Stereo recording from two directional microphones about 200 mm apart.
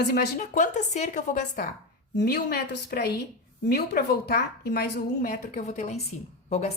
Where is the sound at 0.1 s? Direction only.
45° left (ahead or behind).